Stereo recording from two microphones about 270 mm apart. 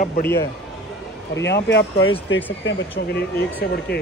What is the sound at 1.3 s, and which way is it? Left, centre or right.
Speech, left.